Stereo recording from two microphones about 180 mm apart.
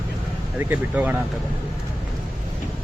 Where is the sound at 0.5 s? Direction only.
10° right (ahead or behind).